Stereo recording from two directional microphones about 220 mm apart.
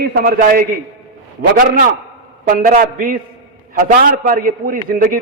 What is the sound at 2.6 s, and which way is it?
A man's voice, 40° right (ahead or behind).